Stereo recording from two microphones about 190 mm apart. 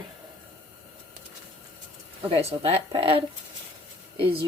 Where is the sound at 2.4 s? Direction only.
35° right (ahead or behind).